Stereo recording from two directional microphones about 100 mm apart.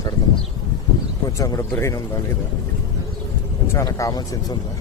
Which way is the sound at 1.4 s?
30° left (ahead or behind).